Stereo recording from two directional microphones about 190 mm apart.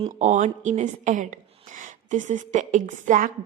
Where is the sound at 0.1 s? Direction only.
40° right (ahead or behind).